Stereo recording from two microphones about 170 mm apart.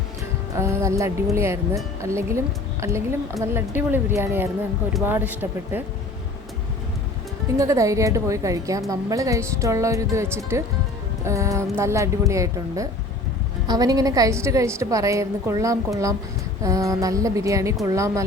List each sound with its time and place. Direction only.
0.5 s speech: 15° right (ahead or behind)
7.5 s a woman's voice: 20° right (ahead or behind)